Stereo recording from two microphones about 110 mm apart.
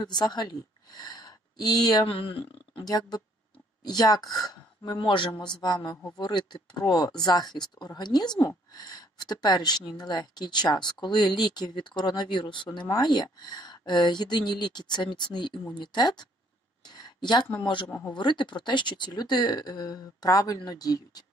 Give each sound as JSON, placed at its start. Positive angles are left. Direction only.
{"t": 0.0, "sound": "speech", "side_deg": 40}
{"t": 2.0, "sound": "speech", "side_deg": 50}
{"t": 2.8, "sound": "a woman's voice", "side_deg": 35}
{"t": 16.8, "sound": "a sound", "side_deg": 40}
{"t": 18.1, "sound": "a woman's voice", "side_deg": 45}